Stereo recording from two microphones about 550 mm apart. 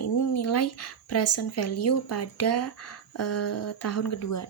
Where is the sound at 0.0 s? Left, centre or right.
Left.